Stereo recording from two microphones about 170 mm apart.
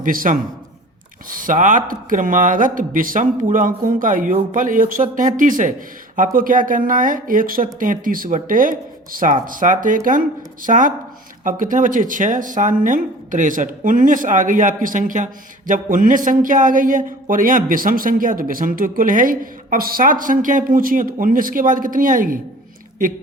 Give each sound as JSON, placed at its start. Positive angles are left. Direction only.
{"t": 0.0, "sound": "a man's voice", "side_deg": -55}